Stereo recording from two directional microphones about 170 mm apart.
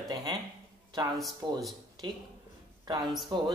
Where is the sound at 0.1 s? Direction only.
25° right (ahead or behind).